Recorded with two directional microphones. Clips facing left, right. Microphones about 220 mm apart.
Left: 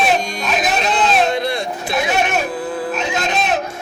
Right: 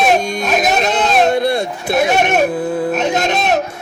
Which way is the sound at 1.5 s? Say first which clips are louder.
Right 5 dB; 40° right (ahead or behind).